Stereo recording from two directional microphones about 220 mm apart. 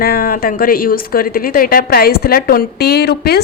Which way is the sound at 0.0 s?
45° left (ahead or behind).